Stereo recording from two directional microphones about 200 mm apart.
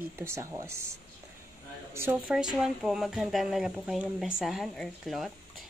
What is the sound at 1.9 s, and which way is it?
Speech, 10° right (ahead or behind).